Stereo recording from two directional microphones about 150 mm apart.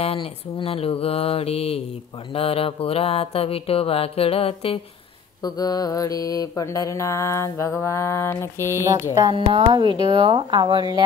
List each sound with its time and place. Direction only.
0.0 s music: 35° left (ahead or behind)
5.4 s mantra: 25° left (ahead or behind)
8.7 s music: 15° right (ahead or behind)
9.7 s speech: 30° right (ahead or behind)